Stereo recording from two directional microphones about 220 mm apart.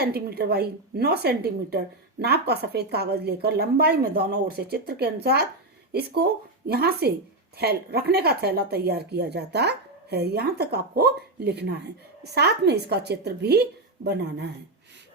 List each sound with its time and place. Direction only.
0.0 s speech: 45° right (ahead or behind)